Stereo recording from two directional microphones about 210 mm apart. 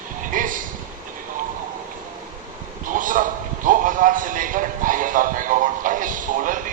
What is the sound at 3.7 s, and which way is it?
Music, 40° right (ahead or behind).